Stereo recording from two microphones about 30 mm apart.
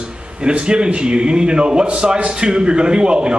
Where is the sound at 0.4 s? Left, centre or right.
Right.